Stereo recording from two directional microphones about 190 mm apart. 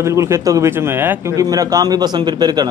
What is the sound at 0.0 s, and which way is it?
Speech, 15° right (ahead or behind).